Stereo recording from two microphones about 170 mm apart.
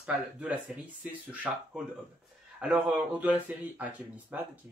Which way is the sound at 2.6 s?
5° right (ahead or behind).